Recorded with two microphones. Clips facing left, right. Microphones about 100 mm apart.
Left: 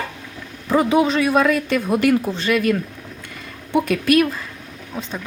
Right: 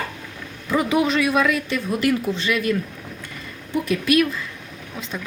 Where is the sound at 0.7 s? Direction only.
30° left (ahead or behind).